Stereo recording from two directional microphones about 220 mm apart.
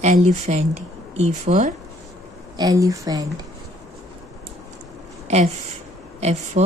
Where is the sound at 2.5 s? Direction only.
15° right (ahead or behind).